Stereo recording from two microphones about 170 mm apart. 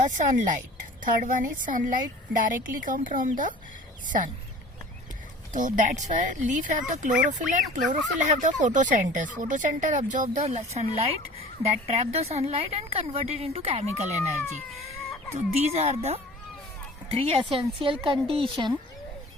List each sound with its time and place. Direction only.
0.0 s a woman's voice: 50° right (ahead or behind)
5.5 s a woman's voice: 50° right (ahead or behind)
15.4 s speech: 40° right (ahead or behind)